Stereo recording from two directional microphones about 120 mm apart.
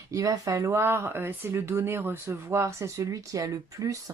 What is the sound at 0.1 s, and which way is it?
Speech, 25° right (ahead or behind).